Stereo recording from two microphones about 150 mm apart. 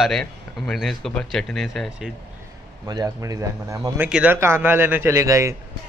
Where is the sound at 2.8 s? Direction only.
25° right (ahead or behind).